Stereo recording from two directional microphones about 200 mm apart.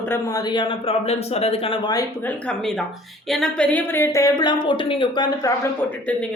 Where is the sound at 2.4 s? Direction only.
5° left (ahead or behind); by 5.5 s 20° left (ahead or behind).